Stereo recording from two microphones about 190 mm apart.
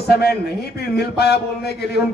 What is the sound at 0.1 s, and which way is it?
A man's voice, 55° left (ahead or behind).